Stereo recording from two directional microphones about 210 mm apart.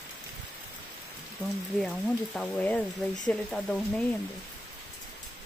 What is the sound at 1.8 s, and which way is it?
Speech, 5° left (ahead or behind).